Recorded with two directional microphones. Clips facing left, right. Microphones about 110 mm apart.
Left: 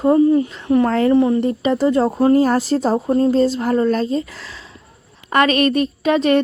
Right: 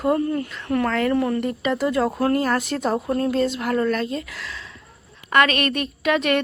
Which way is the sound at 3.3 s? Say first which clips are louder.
Left 6 dB; 35° left (ahead or behind).